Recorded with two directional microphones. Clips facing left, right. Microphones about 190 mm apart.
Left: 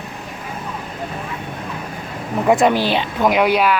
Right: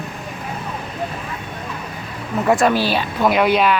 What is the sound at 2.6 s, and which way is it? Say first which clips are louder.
A woman's voice: left 1 dB; 20° left (ahead or behind).